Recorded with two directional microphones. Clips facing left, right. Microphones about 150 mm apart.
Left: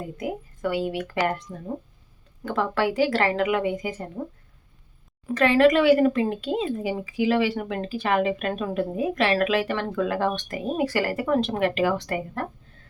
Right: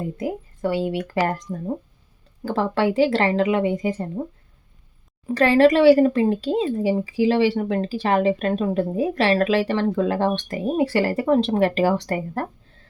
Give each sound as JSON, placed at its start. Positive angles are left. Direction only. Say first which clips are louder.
{"t": 0.2, "sound": "a woman's voice", "louder": "right 1 dB", "side_deg": -30}
{"t": 5.2, "sound": "speech", "louder": "right 3 dB", "side_deg": -35}